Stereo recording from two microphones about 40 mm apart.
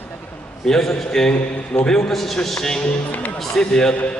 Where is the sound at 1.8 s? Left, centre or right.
Left.